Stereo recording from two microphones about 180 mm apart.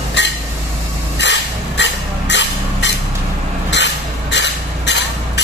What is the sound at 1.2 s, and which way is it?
Vehicle, 80° left.